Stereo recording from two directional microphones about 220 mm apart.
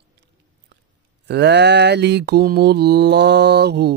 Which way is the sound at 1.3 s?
50° right (ahead or behind).